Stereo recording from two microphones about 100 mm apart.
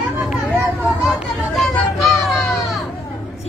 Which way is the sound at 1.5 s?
Centre (ahead or behind).